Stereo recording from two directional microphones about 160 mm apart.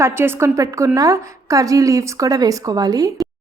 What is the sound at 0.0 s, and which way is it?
A woman's voice, 15° right (ahead or behind).